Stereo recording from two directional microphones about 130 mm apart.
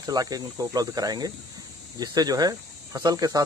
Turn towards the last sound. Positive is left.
turn(degrees=-30)  # may be behind; listen again after turning